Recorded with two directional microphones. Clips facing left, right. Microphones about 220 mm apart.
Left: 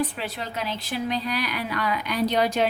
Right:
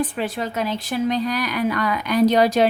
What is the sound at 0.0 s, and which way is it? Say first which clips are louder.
A woman's voice: right 5 dB; 50° right (ahead or behind).